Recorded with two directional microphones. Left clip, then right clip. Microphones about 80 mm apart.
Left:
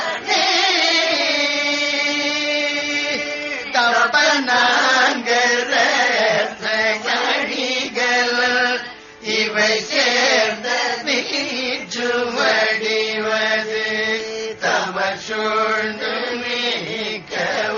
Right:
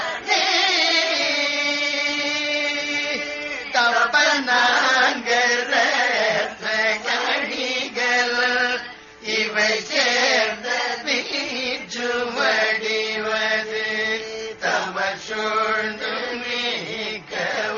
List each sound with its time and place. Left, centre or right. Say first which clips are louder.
0.3 s a sound: left 2 dB; right
3.8 s chant: left 2 dB; right
7.3 s chant: left 3 dB; right
9.3 s chant: left 3 dB; right
12.0 s mantra: left 3 dB; right
17.4 s music: left 3 dB; right